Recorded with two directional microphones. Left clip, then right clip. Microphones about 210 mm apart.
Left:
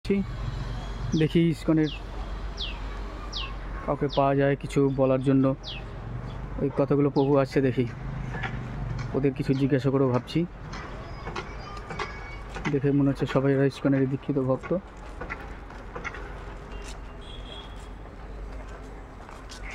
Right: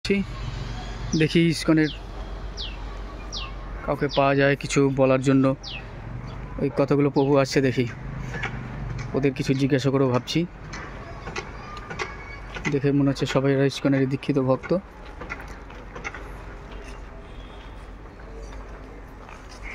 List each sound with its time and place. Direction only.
1.1 s speech: centre (ahead or behind)
3.8 s speech: 5° left (ahead or behind)
6.6 s speech: centre (ahead or behind)
9.1 s speech: centre (ahead or behind)
12.5 s speech: centre (ahead or behind)
14.2 s speech: 15° right (ahead or behind)